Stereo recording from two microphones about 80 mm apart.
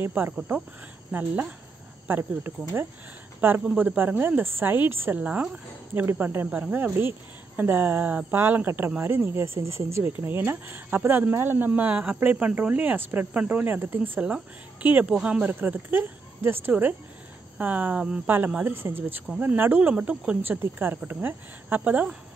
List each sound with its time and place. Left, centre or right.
0.0 s speech: right
5.1 s speech: centre
15.0 s speech: centre
18.5 s speech: right
20.4 s speech: right